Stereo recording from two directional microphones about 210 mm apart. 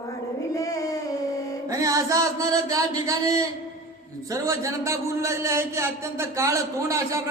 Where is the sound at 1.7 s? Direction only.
15° right (ahead or behind).